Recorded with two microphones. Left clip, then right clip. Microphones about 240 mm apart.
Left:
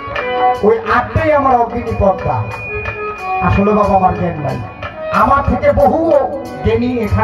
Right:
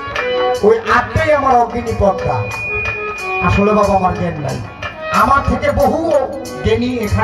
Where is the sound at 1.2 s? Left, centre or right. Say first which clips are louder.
Left 1 dB; left.